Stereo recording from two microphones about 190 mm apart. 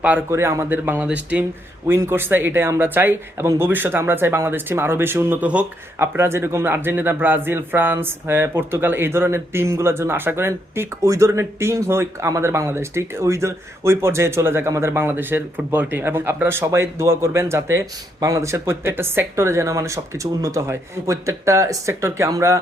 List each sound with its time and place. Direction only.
0.0 s speech: 10° right (ahead or behind)